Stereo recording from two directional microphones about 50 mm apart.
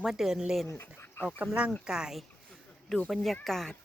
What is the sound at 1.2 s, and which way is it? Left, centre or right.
Speech, left.